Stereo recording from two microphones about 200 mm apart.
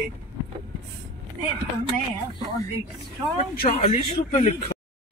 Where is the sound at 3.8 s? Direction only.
30° left (ahead or behind).